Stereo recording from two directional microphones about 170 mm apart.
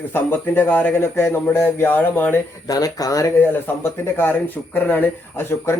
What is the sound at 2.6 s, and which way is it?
Speech, 20° left (ahead or behind).